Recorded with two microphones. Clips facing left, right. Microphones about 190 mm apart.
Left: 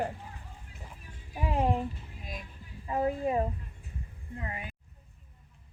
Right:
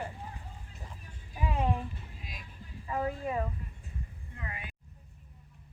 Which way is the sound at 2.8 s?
25° left (ahead or behind).